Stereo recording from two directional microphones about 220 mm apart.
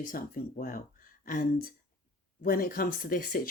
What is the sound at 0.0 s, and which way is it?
Speech, 40° left (ahead or behind).